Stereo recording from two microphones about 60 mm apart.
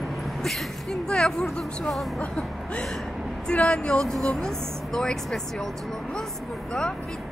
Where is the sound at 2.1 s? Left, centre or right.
Left.